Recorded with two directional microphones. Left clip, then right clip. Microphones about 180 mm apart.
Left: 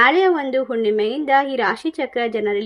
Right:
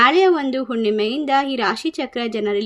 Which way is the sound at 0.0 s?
20° right (ahead or behind).